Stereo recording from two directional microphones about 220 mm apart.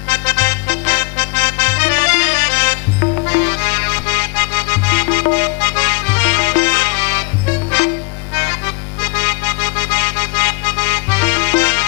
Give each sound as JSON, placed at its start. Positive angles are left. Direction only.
{"t": 0.1, "sound": "music", "side_deg": 10}
{"t": 9.9, "sound": "music", "side_deg": 10}